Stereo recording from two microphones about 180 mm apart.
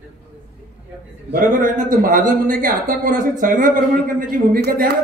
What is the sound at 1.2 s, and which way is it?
A man's voice, 50° right (ahead or behind).